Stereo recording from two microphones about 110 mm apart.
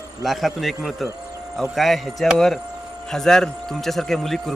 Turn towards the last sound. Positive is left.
turn(degrees=0)  # may be behind; listen again after turning